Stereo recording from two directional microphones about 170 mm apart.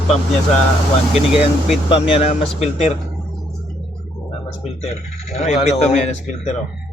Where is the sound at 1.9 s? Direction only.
30° left (ahead or behind).